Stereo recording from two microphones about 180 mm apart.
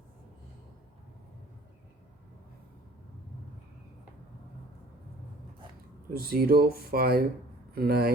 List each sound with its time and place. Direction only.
6.1 s speech: 55° right (ahead or behind)